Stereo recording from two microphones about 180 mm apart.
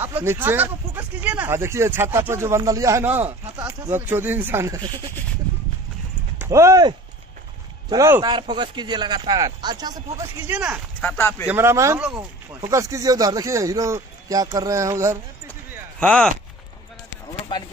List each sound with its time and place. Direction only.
0.0 s speech: 10° right (ahead or behind)
6.3 s speech: 15° right (ahead or behind)
10.4 s speech: 10° right (ahead or behind)
11.0 s speech: 10° left (ahead or behind)
11.4 s speech: 15° right (ahead or behind)
12.0 s speech: 5° right (ahead or behind)
12.5 s speech: 20° right (ahead or behind)
16.0 s speech: 5° left (ahead or behind)